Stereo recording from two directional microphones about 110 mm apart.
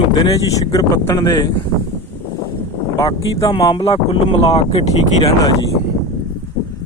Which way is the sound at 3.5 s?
55° left (ahead or behind).